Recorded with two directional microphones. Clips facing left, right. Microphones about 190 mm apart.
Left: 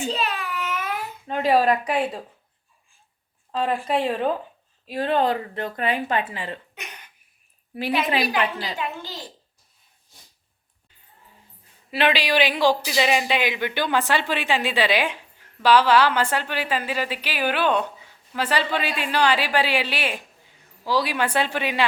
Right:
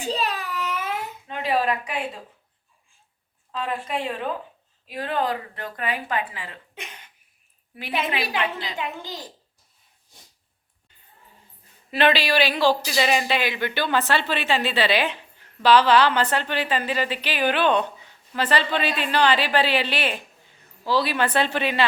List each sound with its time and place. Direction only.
0.0 s child singing: 35° right (ahead or behind)
1.3 s a woman's voice: 40° left (ahead or behind)
3.5 s a woman's voice: 35° left (ahead or behind)
6.7 s cough: 25° right (ahead or behind)
8.2 s a woman's voice: 25° right (ahead or behind)
8.8 s a child's voice: 15° right (ahead or behind)
11.9 s a woman's voice: 10° left (ahead or behind)